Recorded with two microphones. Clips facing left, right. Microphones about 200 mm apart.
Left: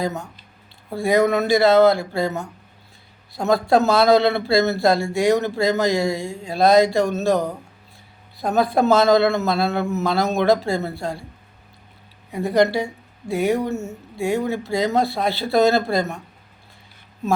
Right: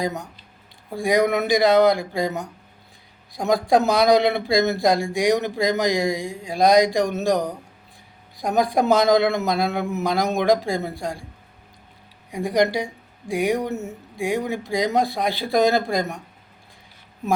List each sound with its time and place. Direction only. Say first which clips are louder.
0.0 s a man's voice: left 1 dB; 15° right (ahead or behind)
12.3 s a man's voice: left 2 dB; 15° right (ahead or behind)